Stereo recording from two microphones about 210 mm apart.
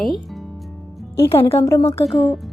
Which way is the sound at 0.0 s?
Centre (ahead or behind).